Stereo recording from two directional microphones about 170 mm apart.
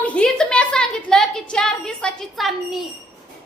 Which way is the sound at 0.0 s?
5° left (ahead or behind).